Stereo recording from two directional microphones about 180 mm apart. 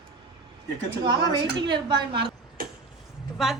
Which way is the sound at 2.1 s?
60° right (ahead or behind).